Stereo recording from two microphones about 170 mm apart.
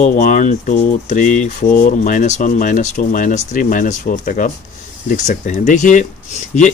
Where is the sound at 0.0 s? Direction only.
45° left (ahead or behind).